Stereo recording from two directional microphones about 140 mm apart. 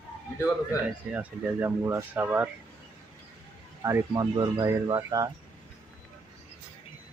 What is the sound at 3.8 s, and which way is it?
Speech, 20° right (ahead or behind).